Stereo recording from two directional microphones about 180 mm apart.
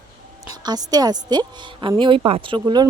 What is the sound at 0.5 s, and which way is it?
A woman's voice, 20° right (ahead or behind).